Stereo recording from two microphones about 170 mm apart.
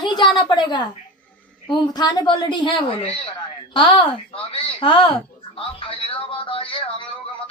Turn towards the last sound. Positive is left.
turn(degrees=30)  # may be behind; listen again after turning